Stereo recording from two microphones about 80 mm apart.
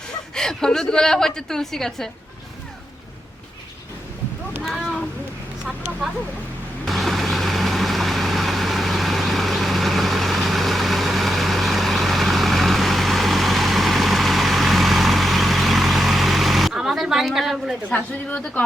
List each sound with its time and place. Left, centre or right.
0.3 s a woman's voice: centre
6.8 s vehicle: centre
17.8 s a woman's voice: centre